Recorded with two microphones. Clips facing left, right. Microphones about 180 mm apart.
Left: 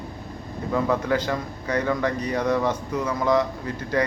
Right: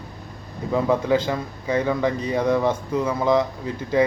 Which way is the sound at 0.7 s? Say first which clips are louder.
Right 3 dB; 15° right (ahead or behind).